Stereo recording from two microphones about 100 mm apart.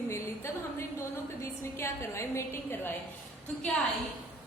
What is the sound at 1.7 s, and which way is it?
A woman's voice, 25° left (ahead or behind).